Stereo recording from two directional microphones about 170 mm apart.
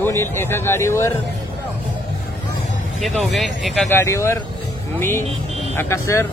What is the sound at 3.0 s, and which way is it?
Speech, centre (ahead or behind).